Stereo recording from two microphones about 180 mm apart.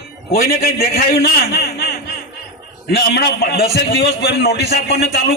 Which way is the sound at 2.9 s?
65° left (ahead or behind).